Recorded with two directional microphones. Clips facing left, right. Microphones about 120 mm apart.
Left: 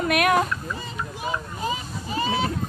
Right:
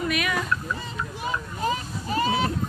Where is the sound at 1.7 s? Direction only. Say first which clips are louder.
Right 3 dB; centre (ahead or behind).